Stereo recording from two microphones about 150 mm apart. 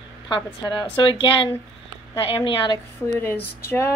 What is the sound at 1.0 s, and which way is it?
Speech, 35° left (ahead or behind).